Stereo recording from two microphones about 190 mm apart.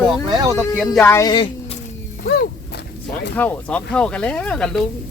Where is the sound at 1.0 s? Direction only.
15° left (ahead or behind).